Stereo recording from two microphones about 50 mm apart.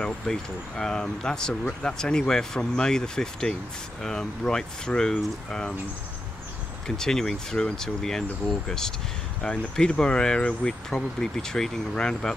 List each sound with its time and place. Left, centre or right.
0.3 s speech: centre
7.0 s speech: centre